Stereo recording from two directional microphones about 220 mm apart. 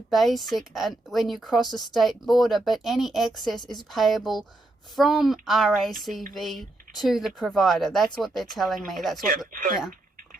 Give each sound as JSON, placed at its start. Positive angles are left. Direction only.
{"t": 0.1, "sound": "speech", "side_deg": 0}
{"t": 9.5, "sound": "speech", "side_deg": -40}